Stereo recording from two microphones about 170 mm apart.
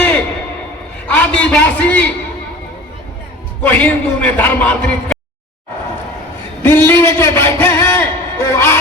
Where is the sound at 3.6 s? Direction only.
10° left (ahead or behind).